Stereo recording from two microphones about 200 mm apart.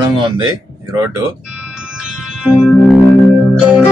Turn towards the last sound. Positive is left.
turn(degrees=-5)  # may be behind; listen again after turning